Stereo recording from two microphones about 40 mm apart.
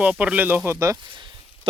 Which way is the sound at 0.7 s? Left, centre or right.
Right.